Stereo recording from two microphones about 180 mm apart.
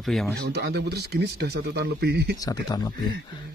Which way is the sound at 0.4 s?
65° right (ahead or behind).